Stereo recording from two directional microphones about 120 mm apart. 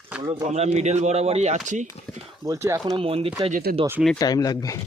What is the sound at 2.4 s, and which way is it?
Speech, 25° right (ahead or behind).